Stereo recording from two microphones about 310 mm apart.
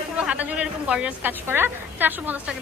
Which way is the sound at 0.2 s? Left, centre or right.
Centre.